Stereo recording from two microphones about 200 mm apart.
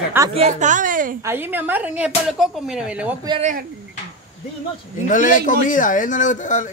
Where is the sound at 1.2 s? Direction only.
10° right (ahead or behind).